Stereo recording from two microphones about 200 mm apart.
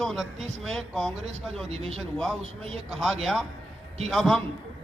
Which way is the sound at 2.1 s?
Centre (ahead or behind).